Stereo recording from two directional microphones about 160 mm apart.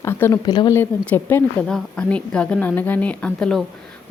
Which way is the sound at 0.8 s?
15° left (ahead or behind).